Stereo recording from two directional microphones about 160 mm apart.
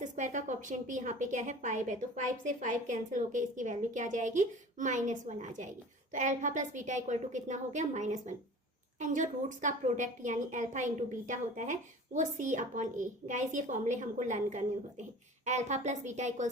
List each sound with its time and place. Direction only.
0.0 s a woman's voice: 50° right (ahead or behind)